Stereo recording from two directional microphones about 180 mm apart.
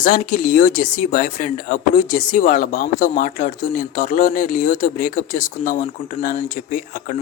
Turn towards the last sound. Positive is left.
turn(degrees=45)  # may be behind; listen again after turning